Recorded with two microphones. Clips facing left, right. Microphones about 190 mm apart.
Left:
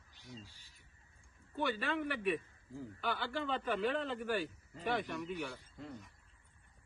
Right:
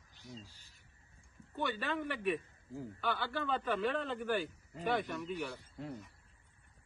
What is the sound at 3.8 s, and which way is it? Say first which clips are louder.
Speech: right 1 dB; centre (ahead or behind).